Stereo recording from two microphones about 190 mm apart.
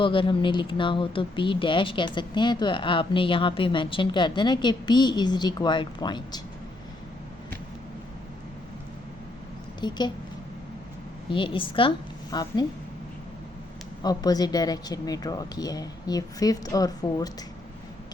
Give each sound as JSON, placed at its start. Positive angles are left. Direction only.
{"t": 0.0, "sound": "speech", "side_deg": 25}
{"t": 9.8, "sound": "speech", "side_deg": 25}
{"t": 11.3, "sound": "a woman's voice", "side_deg": 25}
{"t": 14.0, "sound": "speech", "side_deg": 20}